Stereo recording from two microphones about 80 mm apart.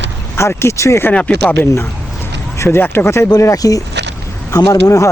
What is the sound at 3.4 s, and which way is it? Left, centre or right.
Speech, left.